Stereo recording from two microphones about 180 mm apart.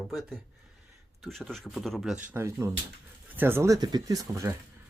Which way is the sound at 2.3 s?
15° right (ahead or behind).